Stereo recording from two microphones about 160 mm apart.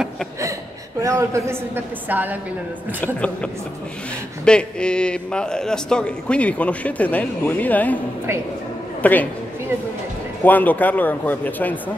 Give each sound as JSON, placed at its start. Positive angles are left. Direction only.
{"t": 1.0, "sound": "a woman's voice", "side_deg": -20}
{"t": 4.5, "sound": "a man's voice", "side_deg": 5}
{"t": 9.0, "sound": "a man's voice", "side_deg": 10}
{"t": 10.4, "sound": "a man's voice", "side_deg": 10}